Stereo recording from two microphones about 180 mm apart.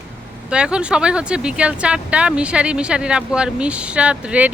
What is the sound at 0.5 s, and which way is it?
Speech, 5° right (ahead or behind).